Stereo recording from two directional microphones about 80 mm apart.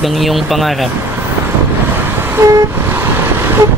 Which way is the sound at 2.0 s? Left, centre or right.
Right.